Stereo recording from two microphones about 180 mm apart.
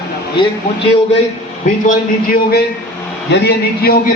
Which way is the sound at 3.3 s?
60° left (ahead or behind).